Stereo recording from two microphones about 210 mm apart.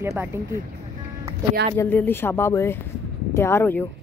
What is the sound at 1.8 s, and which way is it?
Speech, 10° left (ahead or behind).